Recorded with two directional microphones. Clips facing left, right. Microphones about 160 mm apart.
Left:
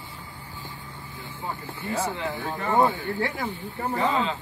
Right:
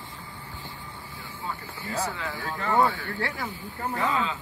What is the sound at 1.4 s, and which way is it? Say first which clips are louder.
Speech: left 3 dB; 25° left (ahead or behind).